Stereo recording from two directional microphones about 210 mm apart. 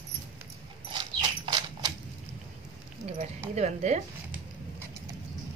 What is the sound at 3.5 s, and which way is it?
Speech, 35° right (ahead or behind).